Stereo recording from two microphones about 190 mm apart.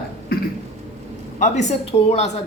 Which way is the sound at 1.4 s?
35° left (ahead or behind).